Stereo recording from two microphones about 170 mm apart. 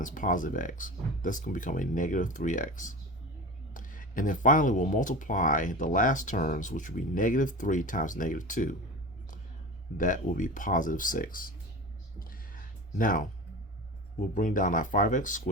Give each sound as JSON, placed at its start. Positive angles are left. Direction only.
{"t": 0.0, "sound": "speech", "side_deg": 50}
{"t": 10.0, "sound": "speech", "side_deg": 50}
{"t": 12.2, "sound": "music", "side_deg": 60}
{"t": 13.0, "sound": "speech", "side_deg": 50}